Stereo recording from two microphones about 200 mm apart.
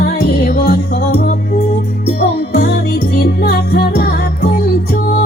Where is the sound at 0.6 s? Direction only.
50° left (ahead or behind).